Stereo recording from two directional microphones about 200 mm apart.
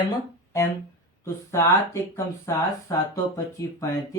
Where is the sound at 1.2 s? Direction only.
15° left (ahead or behind).